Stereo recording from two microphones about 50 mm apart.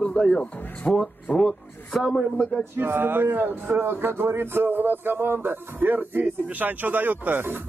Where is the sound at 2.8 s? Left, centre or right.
Right.